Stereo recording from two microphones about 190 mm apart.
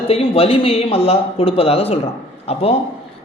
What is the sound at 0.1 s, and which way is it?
A man's voice, 30° left (ahead or behind).